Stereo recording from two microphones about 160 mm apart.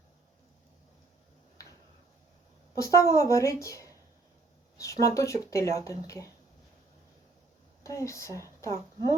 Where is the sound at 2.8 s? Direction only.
20° left (ahead or behind).